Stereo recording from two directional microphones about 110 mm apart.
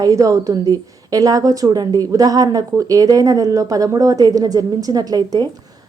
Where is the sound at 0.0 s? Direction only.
30° right (ahead or behind).